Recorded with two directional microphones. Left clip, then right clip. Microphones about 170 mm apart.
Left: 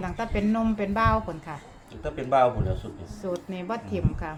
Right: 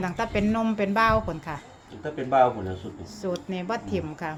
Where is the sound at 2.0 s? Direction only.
60° left (ahead or behind).